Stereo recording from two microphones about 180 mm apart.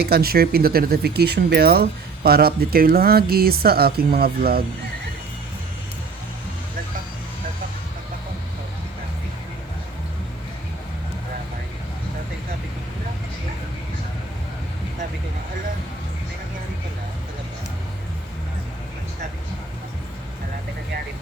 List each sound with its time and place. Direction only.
0.0 s speech: 60° right (ahead or behind)